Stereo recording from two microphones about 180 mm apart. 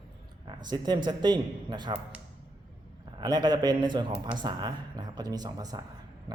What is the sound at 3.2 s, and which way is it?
Speech, 25° right (ahead or behind).